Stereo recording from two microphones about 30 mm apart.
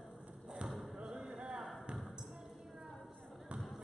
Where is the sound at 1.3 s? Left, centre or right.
Right.